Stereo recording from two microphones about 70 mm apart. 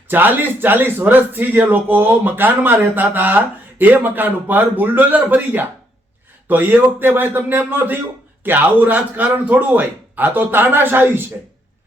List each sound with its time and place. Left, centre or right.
0.1 s speech: right